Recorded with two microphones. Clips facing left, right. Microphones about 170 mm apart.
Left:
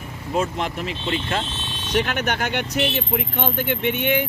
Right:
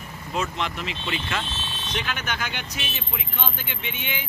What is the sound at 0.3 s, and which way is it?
Speech, 45° left (ahead or behind).